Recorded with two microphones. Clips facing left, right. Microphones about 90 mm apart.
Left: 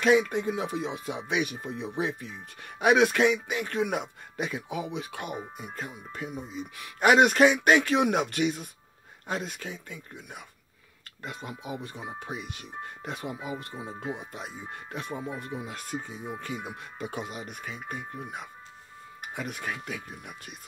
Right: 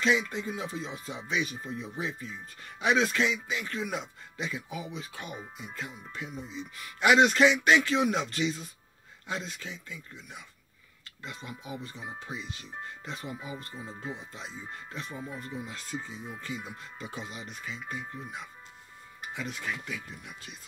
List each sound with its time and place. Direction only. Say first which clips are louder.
0.0 s speech: left 5 dB; 55° left (ahead or behind)
5.6 s speech: left 2 dB; 45° left (ahead or behind)
19.2 s speech: left 1 dB; 55° left (ahead or behind)